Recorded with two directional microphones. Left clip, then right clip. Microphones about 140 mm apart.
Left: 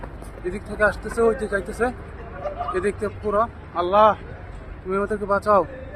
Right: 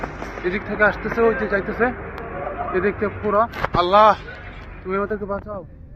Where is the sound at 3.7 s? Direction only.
15° right (ahead or behind).